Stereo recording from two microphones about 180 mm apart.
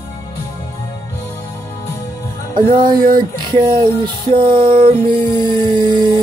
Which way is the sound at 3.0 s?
50° right (ahead or behind).